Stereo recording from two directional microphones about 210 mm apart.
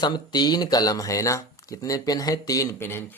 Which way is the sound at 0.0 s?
20° left (ahead or behind).